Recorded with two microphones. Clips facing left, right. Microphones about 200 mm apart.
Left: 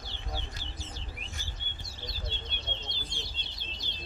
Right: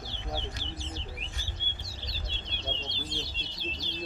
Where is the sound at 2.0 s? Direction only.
55° left (ahead or behind).